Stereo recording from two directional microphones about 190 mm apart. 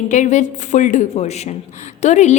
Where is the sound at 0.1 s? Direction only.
40° left (ahead or behind).